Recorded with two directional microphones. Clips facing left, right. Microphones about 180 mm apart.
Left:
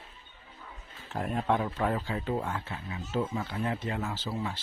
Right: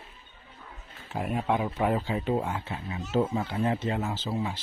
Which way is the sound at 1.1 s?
5° right (ahead or behind).